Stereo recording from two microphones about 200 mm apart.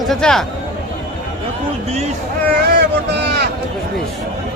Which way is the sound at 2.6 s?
55° right (ahead or behind).